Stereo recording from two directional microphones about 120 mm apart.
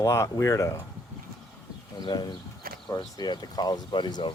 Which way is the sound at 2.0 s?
35° left (ahead or behind).